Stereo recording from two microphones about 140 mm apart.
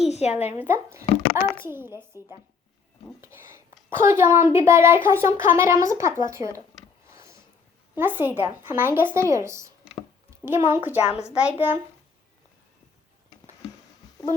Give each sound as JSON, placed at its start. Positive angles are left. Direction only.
{"t": 0.0, "sound": "a woman's voice", "side_deg": 50}
{"t": 0.6, "sound": "speech", "side_deg": -15}
{"t": 3.2, "sound": "speech", "side_deg": -20}
{"t": 7.1, "sound": "a sound", "side_deg": -20}
{"t": 7.9, "sound": "a child's voice", "side_deg": -15}
{"t": 11.0, "sound": "a child's voice", "side_deg": 50}